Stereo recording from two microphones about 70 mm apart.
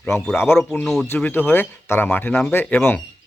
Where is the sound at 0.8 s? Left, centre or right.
Centre.